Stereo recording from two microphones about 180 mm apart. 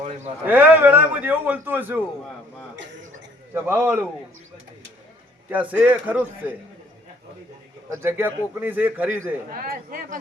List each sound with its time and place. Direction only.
0.4 s a man's voice: 10° right (ahead or behind)
2.7 s a sound: 85° right
3.5 s a man's voice: 10° right (ahead or behind)
5.5 s a man's voice: 10° right (ahead or behind)
7.9 s a man's voice: 10° right (ahead or behind)
9.6 s speech: 50° right (ahead or behind)